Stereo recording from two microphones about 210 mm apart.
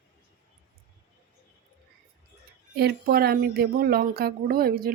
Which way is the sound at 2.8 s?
50° right (ahead or behind).